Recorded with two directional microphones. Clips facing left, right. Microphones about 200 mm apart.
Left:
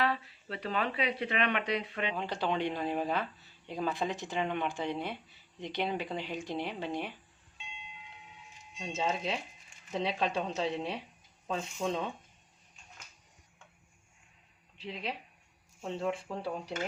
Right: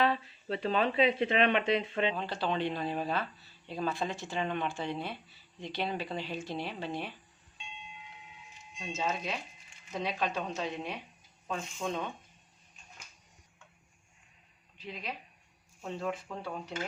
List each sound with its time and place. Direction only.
0.0 s speech: 25° right (ahead or behind)
2.1 s speech: 15° left (ahead or behind)
8.8 s speech: 30° left (ahead or behind)
14.8 s speech: 30° left (ahead or behind)